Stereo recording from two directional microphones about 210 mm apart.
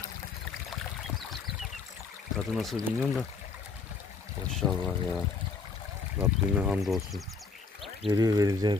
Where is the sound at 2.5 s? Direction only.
Centre (ahead or behind).